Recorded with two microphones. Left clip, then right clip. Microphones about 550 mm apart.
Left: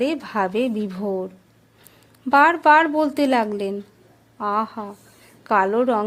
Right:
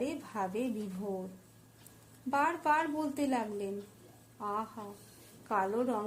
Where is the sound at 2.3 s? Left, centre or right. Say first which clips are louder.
Left 16 dB; right.